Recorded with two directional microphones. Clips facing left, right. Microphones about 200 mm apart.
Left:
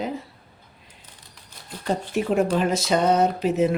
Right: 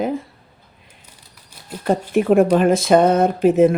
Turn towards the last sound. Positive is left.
turn(degrees=-50)  # may be behind; listen again after turning